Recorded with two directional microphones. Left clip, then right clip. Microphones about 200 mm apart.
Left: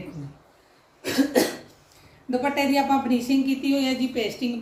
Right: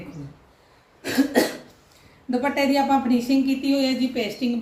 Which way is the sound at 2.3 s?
10° right (ahead or behind).